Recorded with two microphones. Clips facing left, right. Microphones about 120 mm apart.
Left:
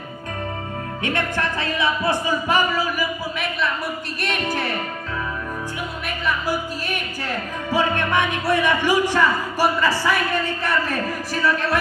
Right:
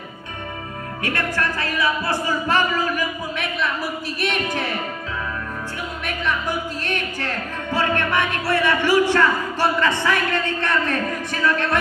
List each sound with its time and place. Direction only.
1.0 s speech: 20° left (ahead or behind); by 3.7 s 5° left (ahead or behind)
4.2 s music: centre (ahead or behind)
6.0 s speech: 5° left (ahead or behind)